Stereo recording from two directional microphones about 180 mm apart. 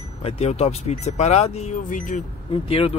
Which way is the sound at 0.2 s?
35° left (ahead or behind).